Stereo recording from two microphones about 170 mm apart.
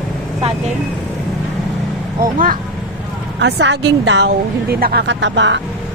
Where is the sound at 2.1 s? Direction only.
55° right (ahead or behind).